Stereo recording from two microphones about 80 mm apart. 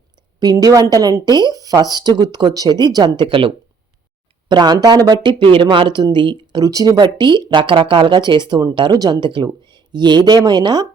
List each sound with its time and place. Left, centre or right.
0.3 s a woman's voice: right
4.4 s speech: right
6.6 s speech: right